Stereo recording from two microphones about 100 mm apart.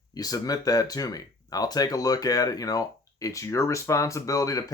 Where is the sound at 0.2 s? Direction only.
40° left (ahead or behind).